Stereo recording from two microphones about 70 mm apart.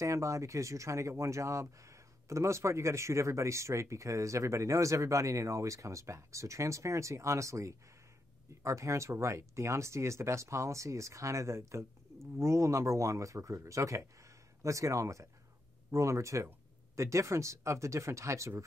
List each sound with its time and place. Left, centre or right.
0.0 s speech: right